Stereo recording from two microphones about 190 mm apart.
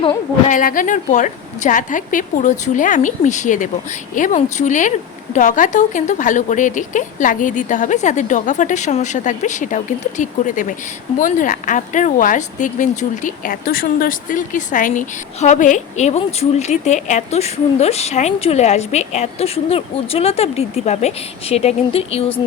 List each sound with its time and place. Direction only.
0.4 s speech: 45° left (ahead or behind); by 22.4 s 30° left (ahead or behind)